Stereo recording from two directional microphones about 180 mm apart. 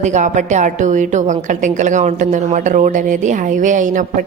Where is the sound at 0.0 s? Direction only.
40° right (ahead or behind).